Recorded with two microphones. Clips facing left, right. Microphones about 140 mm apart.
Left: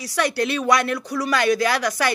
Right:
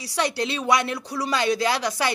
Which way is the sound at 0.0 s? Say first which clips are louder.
Left 3 dB; 25° right (ahead or behind).